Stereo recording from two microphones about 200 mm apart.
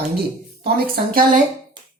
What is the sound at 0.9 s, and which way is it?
Speech, 45° right (ahead or behind).